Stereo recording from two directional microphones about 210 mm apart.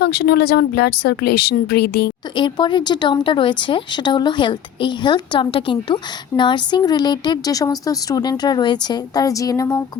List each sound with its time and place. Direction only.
0.0 s speech: 50° left (ahead or behind)
2.3 s speech: 20° left (ahead or behind)